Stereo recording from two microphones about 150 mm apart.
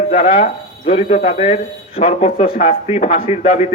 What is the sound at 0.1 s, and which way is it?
Speech, 70° left (ahead or behind).